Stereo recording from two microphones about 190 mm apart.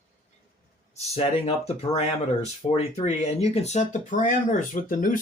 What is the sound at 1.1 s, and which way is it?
Speech, 30° left (ahead or behind).